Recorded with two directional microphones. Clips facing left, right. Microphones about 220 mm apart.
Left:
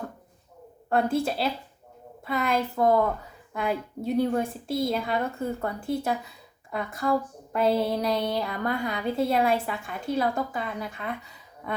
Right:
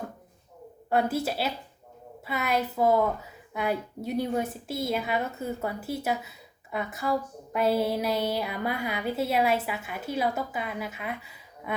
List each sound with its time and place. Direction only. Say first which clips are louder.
0.9 s a woman's voice: left 2 dB; 5° right (ahead or behind)